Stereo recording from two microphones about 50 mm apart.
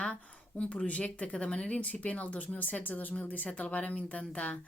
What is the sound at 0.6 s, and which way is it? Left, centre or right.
Speech, left.